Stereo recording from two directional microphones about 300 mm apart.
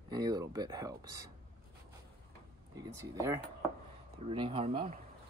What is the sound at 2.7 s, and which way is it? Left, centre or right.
Speech, centre.